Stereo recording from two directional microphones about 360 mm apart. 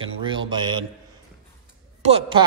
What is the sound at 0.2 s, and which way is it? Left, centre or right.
Speech, centre.